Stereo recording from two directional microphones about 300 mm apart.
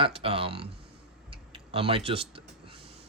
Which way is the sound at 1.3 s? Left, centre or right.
Centre.